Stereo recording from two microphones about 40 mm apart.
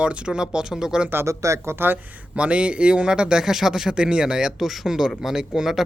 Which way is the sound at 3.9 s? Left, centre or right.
Right.